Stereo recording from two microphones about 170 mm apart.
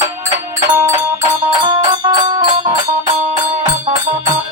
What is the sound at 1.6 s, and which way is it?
Music, 25° right (ahead or behind).